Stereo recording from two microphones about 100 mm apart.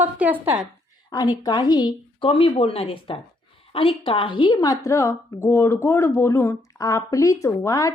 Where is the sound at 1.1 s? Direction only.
40° left (ahead or behind).